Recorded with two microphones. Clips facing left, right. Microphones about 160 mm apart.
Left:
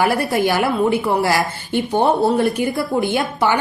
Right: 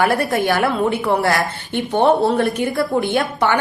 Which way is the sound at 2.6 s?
Centre (ahead or behind).